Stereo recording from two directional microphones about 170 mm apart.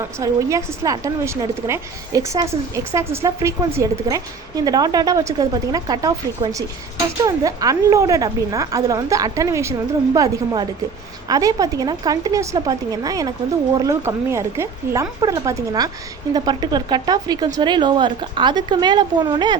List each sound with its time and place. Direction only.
0.0 s a woman's voice: 15° right (ahead or behind)